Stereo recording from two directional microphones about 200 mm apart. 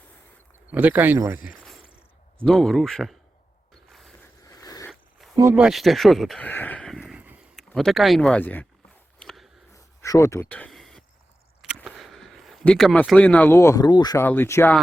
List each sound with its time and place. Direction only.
0.7 s speech: 10° right (ahead or behind)
1.5 s cricket: centre (ahead or behind)
2.4 s speech: centre (ahead or behind)
3.8 s mechanisms: centre (ahead or behind)
4.4 s a sound: 15° left (ahead or behind)
5.4 s speech: 10° right (ahead or behind); by 8.6 s 10° left (ahead or behind)
9.1 s biting: centre (ahead or behind)
9.7 s a sound: 15° left (ahead or behind)
11.6 s speech: 5° right (ahead or behind)